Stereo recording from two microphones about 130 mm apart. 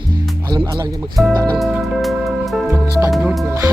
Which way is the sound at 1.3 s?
15° left (ahead or behind).